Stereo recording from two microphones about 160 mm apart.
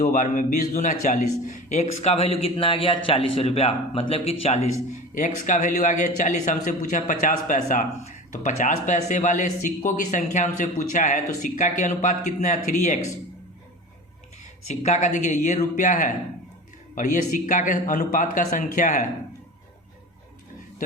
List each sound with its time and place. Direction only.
0.0 s a man's voice: 55° left (ahead or behind)
14.8 s a man's voice: 45° left (ahead or behind)